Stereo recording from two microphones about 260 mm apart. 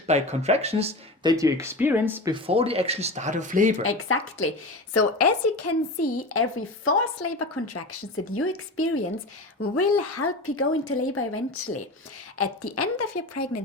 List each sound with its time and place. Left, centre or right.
0.1 s speech: right; by 2.3 s centre
2.3 s speech: right
3.8 s speech: left
4.9 s speech: left
6.2 s speech: left